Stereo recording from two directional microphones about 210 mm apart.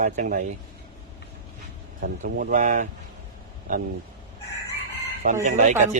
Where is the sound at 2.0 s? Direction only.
45° right (ahead or behind).